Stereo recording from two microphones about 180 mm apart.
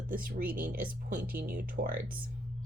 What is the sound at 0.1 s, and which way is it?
Speech, 55° right (ahead or behind).